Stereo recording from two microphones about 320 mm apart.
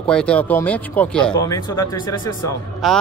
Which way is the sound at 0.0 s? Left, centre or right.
Centre.